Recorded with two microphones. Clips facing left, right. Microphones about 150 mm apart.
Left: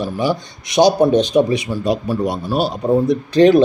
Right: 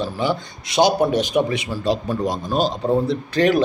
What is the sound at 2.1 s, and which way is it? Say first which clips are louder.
A man's voice: left 3 dB; 10° left (ahead or behind).